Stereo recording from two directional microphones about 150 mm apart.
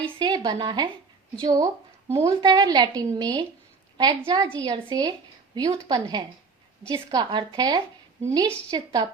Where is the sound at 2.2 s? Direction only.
30° right (ahead or behind).